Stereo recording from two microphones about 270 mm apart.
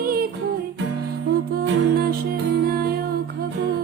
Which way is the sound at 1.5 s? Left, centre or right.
Right.